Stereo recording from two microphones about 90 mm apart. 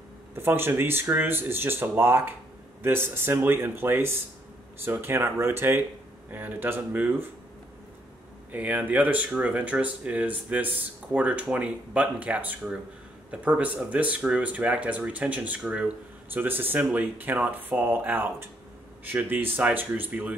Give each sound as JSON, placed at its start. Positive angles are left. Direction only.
{"t": 0.4, "sound": "speech", "side_deg": -25}
{"t": 8.5, "sound": "speech", "side_deg": -15}